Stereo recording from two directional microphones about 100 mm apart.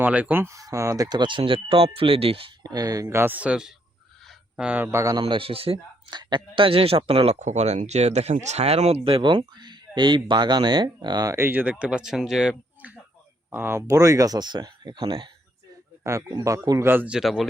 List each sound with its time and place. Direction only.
0.0 s speech: 15° right (ahead or behind)
0.4 s speech: 30° right (ahead or behind)
1.2 s speech: 55° right (ahead or behind)
2.6 s speech: 40° right (ahead or behind)
3.3 s speech: 10° right (ahead or behind)
4.3 s a sound: 10° right (ahead or behind)
4.9 s speech: 30° right (ahead or behind)
5.2 s a man's voice: 65° right (ahead or behind)
6.1 s speech: 50° right (ahead or behind)
11.3 s speech: 20° right (ahead or behind)
13.5 s speech: 20° right (ahead or behind); by 15.3 s 55° right (ahead or behind)
16.0 s speech: 35° right (ahead or behind)
17.1 s speech: 5° right (ahead or behind)